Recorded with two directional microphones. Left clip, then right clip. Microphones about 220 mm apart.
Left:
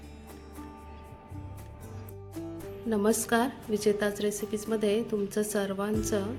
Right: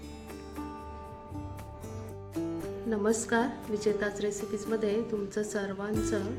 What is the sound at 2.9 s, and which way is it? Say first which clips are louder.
A woman's voice: left 2 dB; 25° left (ahead or behind).